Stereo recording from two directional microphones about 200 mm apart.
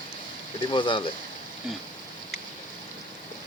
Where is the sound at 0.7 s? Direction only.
25° left (ahead or behind).